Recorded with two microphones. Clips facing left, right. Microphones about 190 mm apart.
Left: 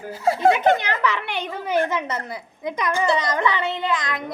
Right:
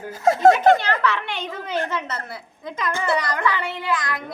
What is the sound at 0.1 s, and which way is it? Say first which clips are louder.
Speech: right 3 dB; 45° right (ahead or behind).